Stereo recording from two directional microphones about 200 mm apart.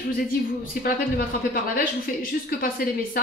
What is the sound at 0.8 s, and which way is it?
A woman's voice, 45° left (ahead or behind).